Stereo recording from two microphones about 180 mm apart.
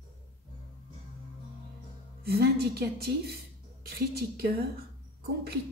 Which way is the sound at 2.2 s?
60° right (ahead or behind).